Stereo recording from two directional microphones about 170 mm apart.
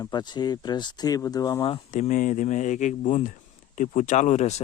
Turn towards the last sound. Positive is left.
turn(degrees=40)  # may be behind; listen again after turning